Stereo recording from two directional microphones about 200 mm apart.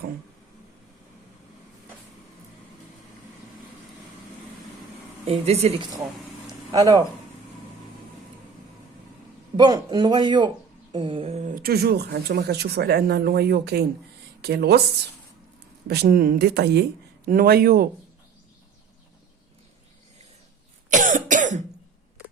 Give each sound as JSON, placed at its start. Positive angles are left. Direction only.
{"t": 5.2, "sound": "speech", "side_deg": -30}
{"t": 6.7, "sound": "a man's voice", "side_deg": -20}
{"t": 9.6, "sound": "a man's voice", "side_deg": -20}
{"t": 15.9, "sound": "speech", "side_deg": -50}
{"t": 20.9, "sound": "cough", "side_deg": -40}